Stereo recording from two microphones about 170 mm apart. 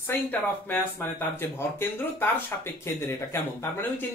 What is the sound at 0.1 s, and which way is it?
Speech, 10° left (ahead or behind).